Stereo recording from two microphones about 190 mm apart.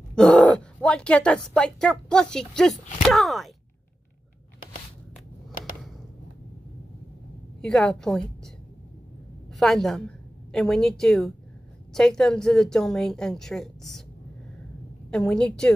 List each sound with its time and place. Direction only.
0.1 s speech: 5° left (ahead or behind)
7.6 s a woman's voice: 5° left (ahead or behind)
9.6 s a woman's voice: centre (ahead or behind)
15.0 s a woman's voice: 5° left (ahead or behind)